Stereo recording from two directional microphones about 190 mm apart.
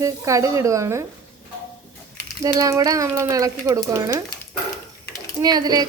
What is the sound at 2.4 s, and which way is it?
A woman's voice, 20° right (ahead or behind).